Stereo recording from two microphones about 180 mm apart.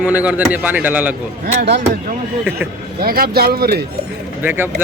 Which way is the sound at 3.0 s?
55° right (ahead or behind).